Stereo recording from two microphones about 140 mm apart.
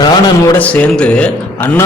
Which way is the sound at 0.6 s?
10° left (ahead or behind).